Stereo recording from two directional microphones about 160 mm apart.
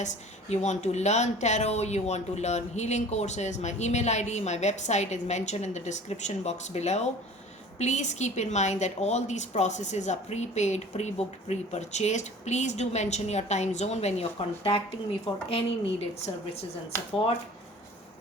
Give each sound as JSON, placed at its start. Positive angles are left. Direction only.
{"t": 0.5, "sound": "a woman's voice", "side_deg": 45}